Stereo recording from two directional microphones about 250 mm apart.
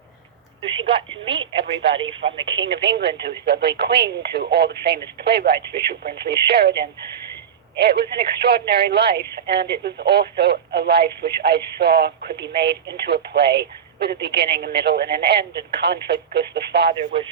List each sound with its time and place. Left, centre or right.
0.9 s a woman's voice: right
2.2 s speech: right
17.0 s a woman's voice: right